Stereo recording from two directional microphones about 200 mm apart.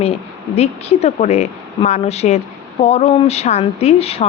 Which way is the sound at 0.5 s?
30° left (ahead or behind).